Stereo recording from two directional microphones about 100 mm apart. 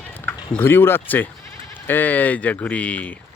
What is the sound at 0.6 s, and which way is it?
Speech, 25° left (ahead or behind).